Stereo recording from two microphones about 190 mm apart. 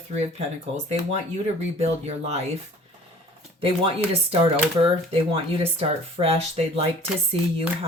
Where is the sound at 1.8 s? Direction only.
35° right (ahead or behind).